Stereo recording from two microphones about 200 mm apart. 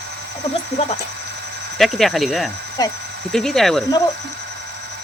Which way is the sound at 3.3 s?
Centre (ahead or behind).